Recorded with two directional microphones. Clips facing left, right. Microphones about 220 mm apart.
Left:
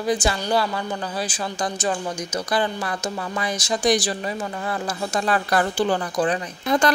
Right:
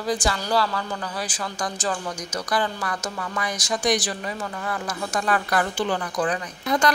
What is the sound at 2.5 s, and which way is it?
Speech, 25° left (ahead or behind).